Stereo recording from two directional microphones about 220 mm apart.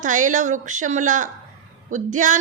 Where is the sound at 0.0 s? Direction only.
35° right (ahead or behind).